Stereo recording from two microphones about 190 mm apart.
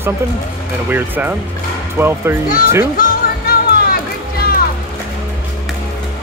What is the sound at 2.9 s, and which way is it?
Music, 45° left (ahead or behind).